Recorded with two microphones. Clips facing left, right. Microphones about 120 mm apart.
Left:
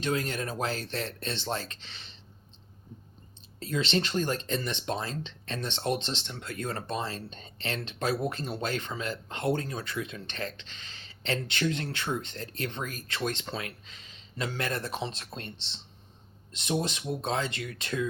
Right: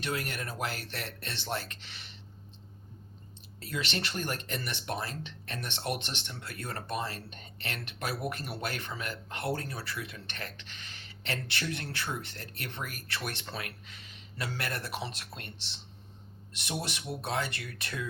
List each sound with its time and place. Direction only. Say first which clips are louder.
0.0 s speech: left 5 dB; 25° left (ahead or behind)
3.6 s speech: left 6 dB; 25° left (ahead or behind)